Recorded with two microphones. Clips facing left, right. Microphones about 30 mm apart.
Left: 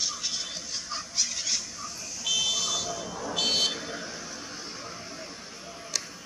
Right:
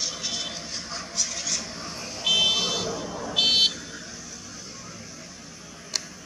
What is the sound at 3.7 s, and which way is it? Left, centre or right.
Vehicle, left.